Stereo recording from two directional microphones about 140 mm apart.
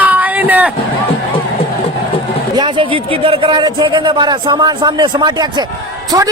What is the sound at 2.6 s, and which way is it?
A man's voice, 35° right (ahead or behind).